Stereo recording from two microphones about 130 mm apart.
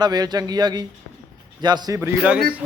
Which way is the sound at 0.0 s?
30° right (ahead or behind).